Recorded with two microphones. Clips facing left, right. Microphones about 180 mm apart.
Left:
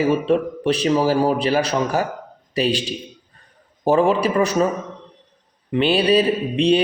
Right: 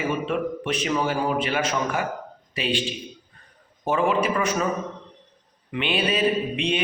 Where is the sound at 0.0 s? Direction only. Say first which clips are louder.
Left 7 dB; 35° left (ahead or behind).